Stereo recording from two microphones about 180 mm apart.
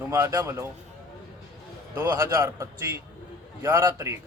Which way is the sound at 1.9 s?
15° right (ahead or behind).